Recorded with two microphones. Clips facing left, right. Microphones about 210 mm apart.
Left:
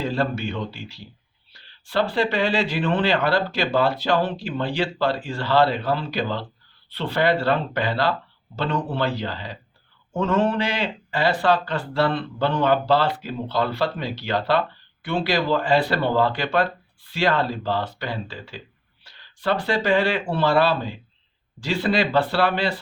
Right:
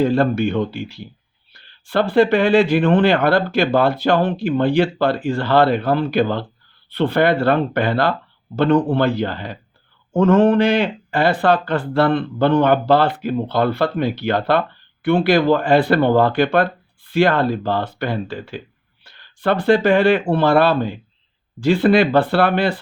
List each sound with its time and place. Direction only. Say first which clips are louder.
0.0 s speech: right 8 dB; 55° right (ahead or behind)